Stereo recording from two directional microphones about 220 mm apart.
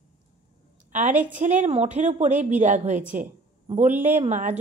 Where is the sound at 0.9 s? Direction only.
35° right (ahead or behind).